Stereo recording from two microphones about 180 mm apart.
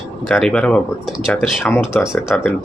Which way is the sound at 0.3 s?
5° left (ahead or behind).